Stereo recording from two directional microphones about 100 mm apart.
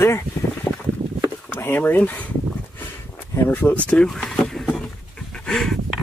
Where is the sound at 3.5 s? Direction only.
20° left (ahead or behind).